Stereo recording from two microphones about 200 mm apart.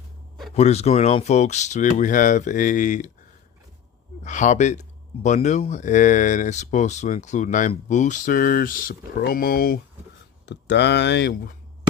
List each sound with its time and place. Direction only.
0.5 s speech: 30° left (ahead or behind)
4.2 s speech: 40° left (ahead or behind)
10.4 s speech: 60° left (ahead or behind)